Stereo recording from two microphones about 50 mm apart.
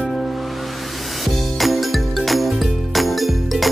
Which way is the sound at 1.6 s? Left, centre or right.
Centre.